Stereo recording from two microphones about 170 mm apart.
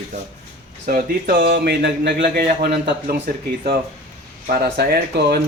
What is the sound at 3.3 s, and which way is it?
Speech, 60° right (ahead or behind).